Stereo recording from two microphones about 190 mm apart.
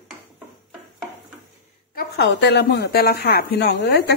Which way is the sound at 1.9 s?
55° left (ahead or behind).